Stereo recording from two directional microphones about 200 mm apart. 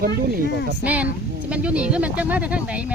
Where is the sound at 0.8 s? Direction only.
5° right (ahead or behind).